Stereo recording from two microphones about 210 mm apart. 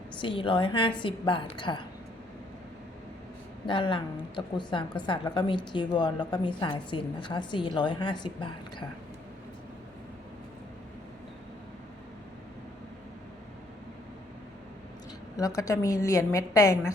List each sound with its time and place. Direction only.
0.2 s a woman's voice: 25° left (ahead or behind)
3.7 s a woman's voice: 25° left (ahead or behind)
15.4 s a woman's voice: 15° left (ahead or behind)